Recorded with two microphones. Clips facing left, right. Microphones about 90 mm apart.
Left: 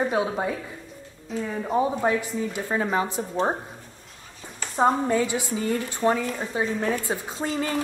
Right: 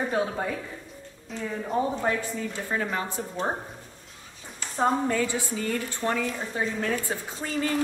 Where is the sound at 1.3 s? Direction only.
Centre (ahead or behind).